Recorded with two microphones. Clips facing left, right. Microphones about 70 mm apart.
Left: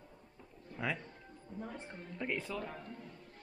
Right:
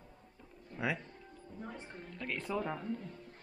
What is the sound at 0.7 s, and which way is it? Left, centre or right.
Speech, centre.